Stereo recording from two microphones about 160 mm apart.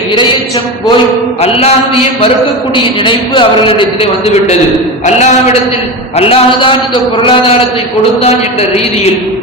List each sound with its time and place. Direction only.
1.4 s a man's voice: 40° left (ahead or behind)
2.7 s a man's voice: 30° left (ahead or behind)
6.1 s a man's voice: 35° left (ahead or behind)